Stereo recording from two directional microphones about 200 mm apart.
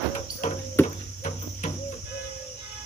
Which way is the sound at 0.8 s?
10° left (ahead or behind).